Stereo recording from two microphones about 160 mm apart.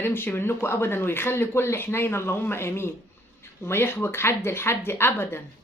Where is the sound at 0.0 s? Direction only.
15° left (ahead or behind).